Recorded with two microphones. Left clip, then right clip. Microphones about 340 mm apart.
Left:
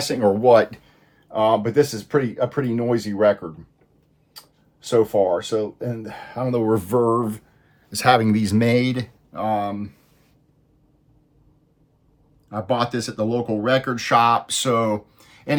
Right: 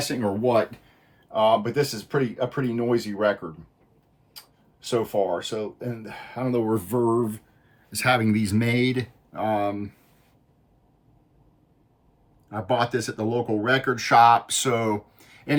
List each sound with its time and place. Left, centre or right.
0.1 s speech: centre
1.3 s speech: left
4.9 s speech: left
6.8 s speech: centre
12.5 s speech: centre